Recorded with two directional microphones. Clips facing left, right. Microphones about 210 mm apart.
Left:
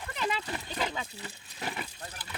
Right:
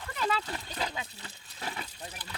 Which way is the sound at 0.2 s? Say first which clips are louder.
Right 1 dB; 15° left (ahead or behind).